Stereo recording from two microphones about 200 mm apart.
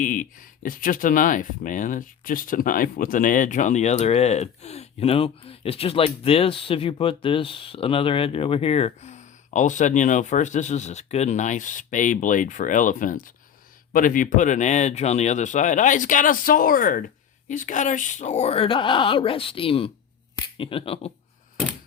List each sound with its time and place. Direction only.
0.0 s speech: 40° left (ahead or behind)